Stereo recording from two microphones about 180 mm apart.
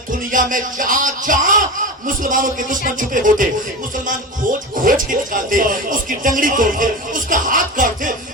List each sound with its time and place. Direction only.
0.3 s speech: 45° right (ahead or behind)
4.8 s speech: 50° right (ahead or behind)